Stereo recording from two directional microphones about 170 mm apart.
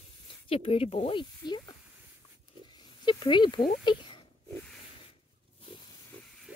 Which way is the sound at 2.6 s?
25° left (ahead or behind).